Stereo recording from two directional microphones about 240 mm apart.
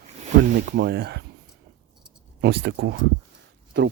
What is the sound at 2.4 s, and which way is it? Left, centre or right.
Speech, right.